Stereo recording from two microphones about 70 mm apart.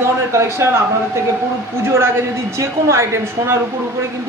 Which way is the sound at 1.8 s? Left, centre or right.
Right.